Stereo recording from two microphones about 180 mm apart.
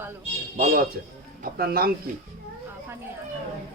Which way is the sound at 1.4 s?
55° right (ahead or behind).